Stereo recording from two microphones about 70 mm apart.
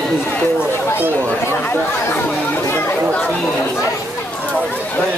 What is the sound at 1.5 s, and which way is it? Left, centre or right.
Chatter, left.